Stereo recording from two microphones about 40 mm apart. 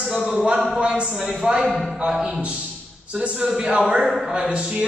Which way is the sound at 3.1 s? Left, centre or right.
Right.